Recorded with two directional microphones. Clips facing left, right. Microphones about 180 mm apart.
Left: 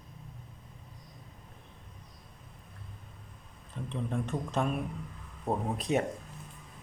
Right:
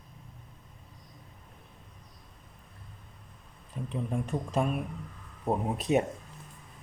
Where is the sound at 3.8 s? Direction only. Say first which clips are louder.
Right 2 dB; 10° right (ahead or behind).